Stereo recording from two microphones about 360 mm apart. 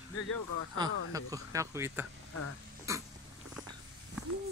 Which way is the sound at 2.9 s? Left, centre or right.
Centre.